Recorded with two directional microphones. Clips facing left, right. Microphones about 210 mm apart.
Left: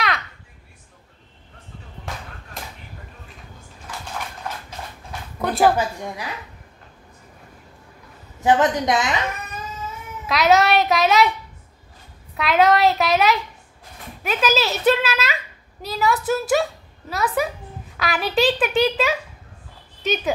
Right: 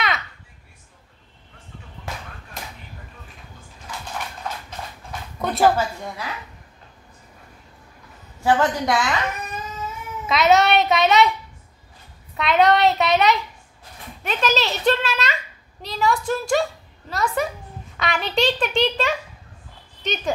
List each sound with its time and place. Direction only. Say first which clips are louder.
5.6 s a woman's voice: even; 15° left (ahead or behind)
8.4 s a woman's voice: left 2 dB; 20° left (ahead or behind)
10.2 s a child's voice: even; centre (ahead or behind)
12.4 s a child's voice: even; centre (ahead or behind)